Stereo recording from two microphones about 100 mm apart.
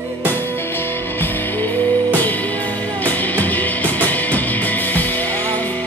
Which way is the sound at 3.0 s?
15° left (ahead or behind).